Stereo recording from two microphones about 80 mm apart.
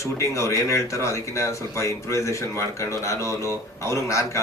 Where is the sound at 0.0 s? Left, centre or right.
Left.